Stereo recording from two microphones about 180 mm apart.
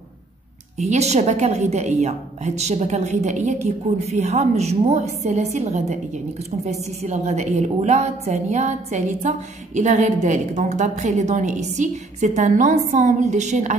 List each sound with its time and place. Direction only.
0.7 s a woman's voice: 40° right (ahead or behind)